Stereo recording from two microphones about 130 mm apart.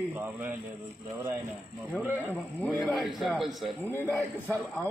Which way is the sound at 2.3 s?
10° left (ahead or behind).